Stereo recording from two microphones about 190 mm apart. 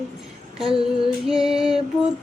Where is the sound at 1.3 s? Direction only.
Centre (ahead or behind).